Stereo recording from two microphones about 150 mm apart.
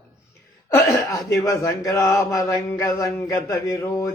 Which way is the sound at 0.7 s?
20° left (ahead or behind).